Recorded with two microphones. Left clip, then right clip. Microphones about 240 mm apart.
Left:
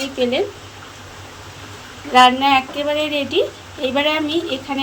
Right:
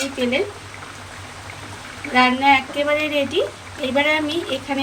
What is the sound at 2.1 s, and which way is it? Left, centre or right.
Speech, centre.